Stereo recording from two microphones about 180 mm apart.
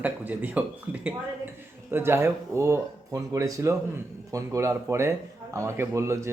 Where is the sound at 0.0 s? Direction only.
10° right (ahead or behind).